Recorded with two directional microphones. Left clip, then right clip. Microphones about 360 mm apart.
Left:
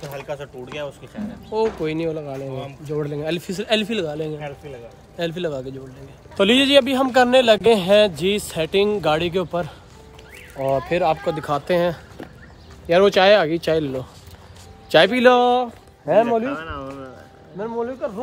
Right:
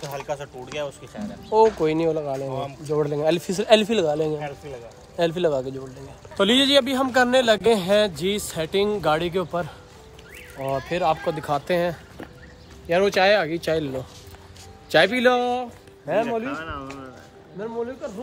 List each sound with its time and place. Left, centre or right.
0.1 s speech: centre
1.5 s speech: centre
4.4 s speech: centre
5.1 s speech: centre
17.6 s speech: centre